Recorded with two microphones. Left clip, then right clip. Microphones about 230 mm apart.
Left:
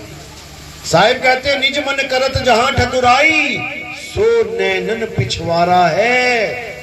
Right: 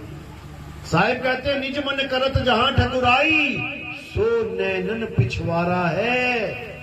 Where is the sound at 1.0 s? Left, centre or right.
Left.